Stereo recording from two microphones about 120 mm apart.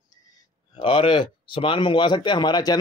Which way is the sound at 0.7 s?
45° left (ahead or behind).